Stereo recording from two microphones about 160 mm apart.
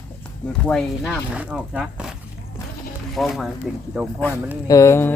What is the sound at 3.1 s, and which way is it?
Speech, centre (ahead or behind).